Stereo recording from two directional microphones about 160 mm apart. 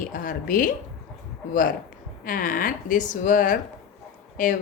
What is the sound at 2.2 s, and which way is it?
Speech, 60° left (ahead or behind).